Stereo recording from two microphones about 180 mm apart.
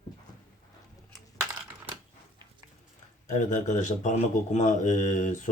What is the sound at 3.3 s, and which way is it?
Speech, 45° left (ahead or behind).